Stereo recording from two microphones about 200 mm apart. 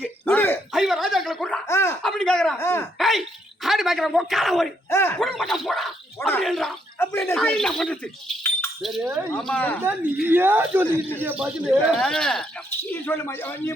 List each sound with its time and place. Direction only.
0.0 s a sound: 10° left (ahead or behind)
0.7 s a sound: centre (ahead or behind)
1.6 s a sound: 15° left (ahead or behind)
2.6 s a woman's voice: 15° left (ahead or behind)
3.0 s speech: centre (ahead or behind)
4.9 s a woman's voice: 10° left (ahead or behind)
5.2 s speech: centre (ahead or behind)
6.1 s a woman's voice: 10° left (ahead or behind)
9.8 s speech: 10° right (ahead or behind); by 13.7 s 10° left (ahead or behind)